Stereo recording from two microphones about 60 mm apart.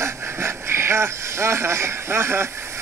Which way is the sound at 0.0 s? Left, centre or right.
Right.